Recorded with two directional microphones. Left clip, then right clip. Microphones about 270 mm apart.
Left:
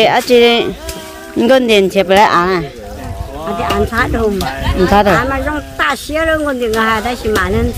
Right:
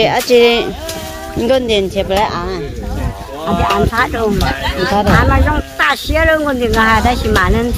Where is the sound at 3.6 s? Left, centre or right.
Centre.